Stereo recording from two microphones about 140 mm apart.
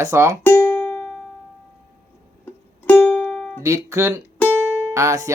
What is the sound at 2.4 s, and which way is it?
Music, 10° left (ahead or behind).